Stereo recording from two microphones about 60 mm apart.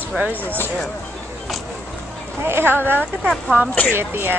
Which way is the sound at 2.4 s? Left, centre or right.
Right.